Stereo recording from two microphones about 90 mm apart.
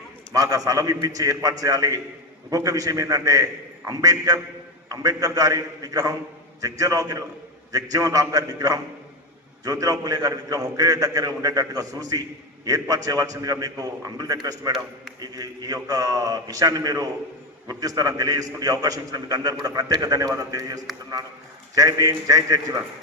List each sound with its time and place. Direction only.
0.3 s a man's voice: 40° right (ahead or behind)